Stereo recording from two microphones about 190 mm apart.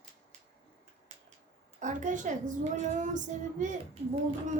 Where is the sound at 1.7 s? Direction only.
40° right (ahead or behind).